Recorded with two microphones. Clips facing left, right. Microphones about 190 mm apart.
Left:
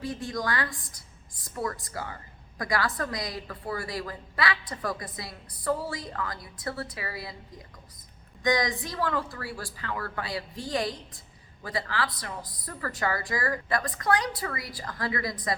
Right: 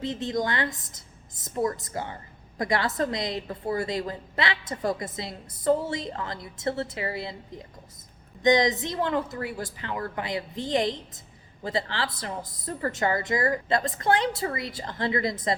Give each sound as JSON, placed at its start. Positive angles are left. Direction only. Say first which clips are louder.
{"t": 0.0, "sound": "a woman's voice", "louder": "right 4 dB", "side_deg": -20}
{"t": 8.4, "sound": "a woman's voice", "louder": "right 5 dB", "side_deg": -20}